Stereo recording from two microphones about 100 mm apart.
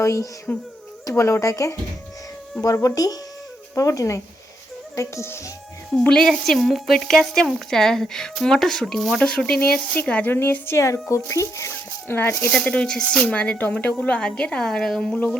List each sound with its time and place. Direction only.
0.0 s a child's voice: 30° left (ahead or behind)
0.5 s speech: 15° left (ahead or behind)
1.0 s speech: 30° left (ahead or behind)
6.0 s speech: 5° left (ahead or behind)
12.5 s speech: 10° left (ahead or behind)